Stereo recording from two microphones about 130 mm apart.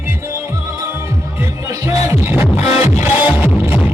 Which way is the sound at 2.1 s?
15° right (ahead or behind).